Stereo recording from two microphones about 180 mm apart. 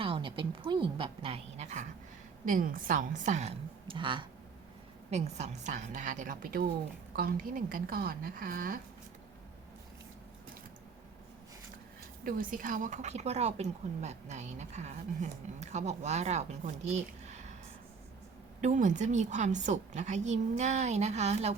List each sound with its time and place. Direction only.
0.0 s a woman's voice: 30° right (ahead or behind)
5.1 s a woman's voice: 40° right (ahead or behind)
12.2 s a woman's voice: 50° right (ahead or behind)
18.6 s a woman's voice: 40° right (ahead or behind)